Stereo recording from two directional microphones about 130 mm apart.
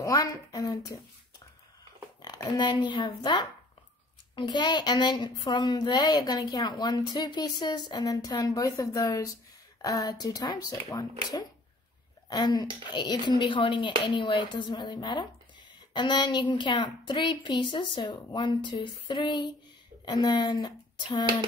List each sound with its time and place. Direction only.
0.0 s speech: 25° left (ahead or behind)
2.2 s a woman's voice: 35° left (ahead or behind)